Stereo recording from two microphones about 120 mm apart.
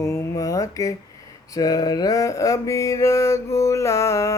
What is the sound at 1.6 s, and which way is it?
Speech, 35° left (ahead or behind).